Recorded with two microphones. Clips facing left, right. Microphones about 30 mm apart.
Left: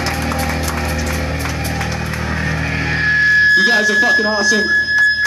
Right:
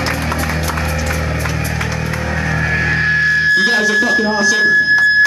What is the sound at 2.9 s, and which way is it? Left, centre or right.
Music, centre.